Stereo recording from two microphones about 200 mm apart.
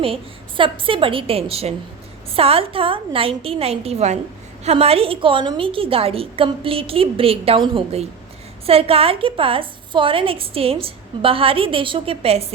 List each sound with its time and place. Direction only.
0.0 s a woman's voice: 25° right (ahead or behind)